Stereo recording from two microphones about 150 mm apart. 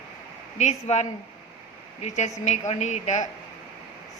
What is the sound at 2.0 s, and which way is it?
A woman's voice, 50° left (ahead or behind).